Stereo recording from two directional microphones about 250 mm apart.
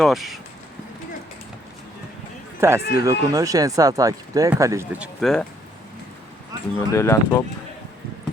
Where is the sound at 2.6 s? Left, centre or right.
Centre.